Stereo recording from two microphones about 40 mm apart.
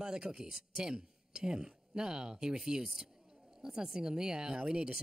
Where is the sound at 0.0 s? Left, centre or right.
Centre.